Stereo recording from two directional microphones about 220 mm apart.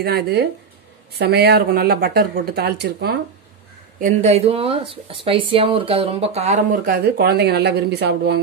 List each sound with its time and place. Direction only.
0.0 s speech: 45° right (ahead or behind)
4.0 s speech: 30° right (ahead or behind); by 8.4 s 50° right (ahead or behind)